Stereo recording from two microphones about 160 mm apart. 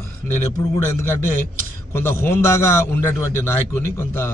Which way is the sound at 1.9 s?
15° left (ahead or behind).